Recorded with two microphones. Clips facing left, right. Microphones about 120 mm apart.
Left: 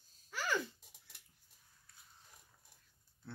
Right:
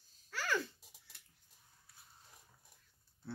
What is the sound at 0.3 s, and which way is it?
Babbling, 15° left (ahead or behind).